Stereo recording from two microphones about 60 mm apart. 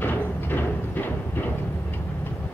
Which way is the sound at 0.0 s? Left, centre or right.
Left.